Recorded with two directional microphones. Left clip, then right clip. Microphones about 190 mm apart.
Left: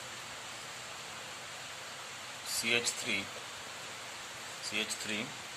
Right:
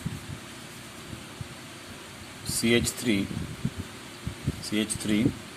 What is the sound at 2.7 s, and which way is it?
Speech, 25° right (ahead or behind).